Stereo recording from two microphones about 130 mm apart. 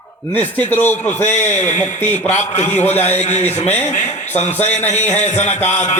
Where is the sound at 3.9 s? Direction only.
65° left (ahead or behind).